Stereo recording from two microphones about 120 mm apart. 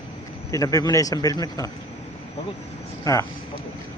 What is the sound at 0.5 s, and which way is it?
Speech, 30° left (ahead or behind).